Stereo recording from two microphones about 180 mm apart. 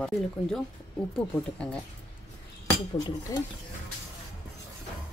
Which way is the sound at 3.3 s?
15° left (ahead or behind).